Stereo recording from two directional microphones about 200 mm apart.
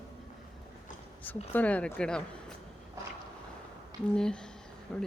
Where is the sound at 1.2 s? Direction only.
10° left (ahead or behind).